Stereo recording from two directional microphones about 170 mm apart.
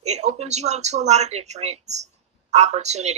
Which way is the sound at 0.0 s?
40° right (ahead or behind).